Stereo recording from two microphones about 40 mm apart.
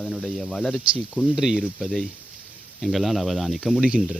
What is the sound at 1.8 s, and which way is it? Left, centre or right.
Speech, centre.